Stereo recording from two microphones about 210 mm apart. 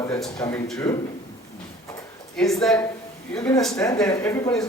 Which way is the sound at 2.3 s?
Centre (ahead or behind).